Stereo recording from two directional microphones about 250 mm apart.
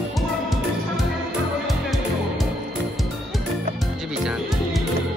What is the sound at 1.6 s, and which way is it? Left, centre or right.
Music, centre.